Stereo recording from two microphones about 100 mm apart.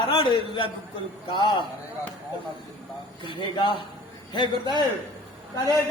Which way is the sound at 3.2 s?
55° left (ahead or behind).